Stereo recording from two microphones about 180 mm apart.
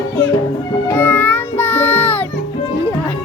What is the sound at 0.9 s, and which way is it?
Music, 10° left (ahead or behind).